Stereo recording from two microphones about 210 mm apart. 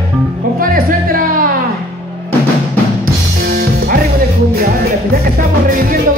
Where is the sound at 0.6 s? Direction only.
45° right (ahead or behind).